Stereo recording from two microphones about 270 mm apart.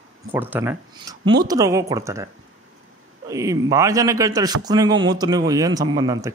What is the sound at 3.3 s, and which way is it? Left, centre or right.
A man's voice, centre.